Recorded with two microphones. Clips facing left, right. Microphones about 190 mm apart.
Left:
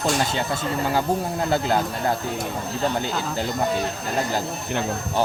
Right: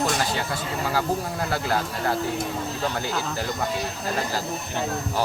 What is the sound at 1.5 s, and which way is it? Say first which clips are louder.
Speech: left 4 dB; 25° left (ahead or behind).